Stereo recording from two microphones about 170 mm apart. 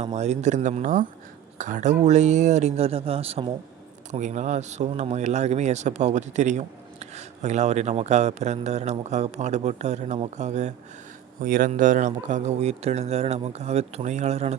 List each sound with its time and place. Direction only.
0.0 s a man's voice: 40° right (ahead or behind)
11.4 s speech: 55° right (ahead or behind)